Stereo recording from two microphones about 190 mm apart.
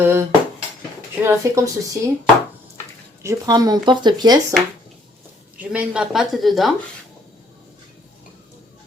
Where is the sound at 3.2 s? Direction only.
20° right (ahead or behind).